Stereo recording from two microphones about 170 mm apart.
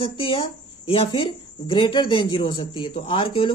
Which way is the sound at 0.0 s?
30° left (ahead or behind).